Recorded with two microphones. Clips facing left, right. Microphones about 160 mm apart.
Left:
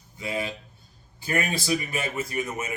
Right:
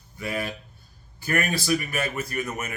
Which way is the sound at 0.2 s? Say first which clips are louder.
Even; 20° left (ahead or behind).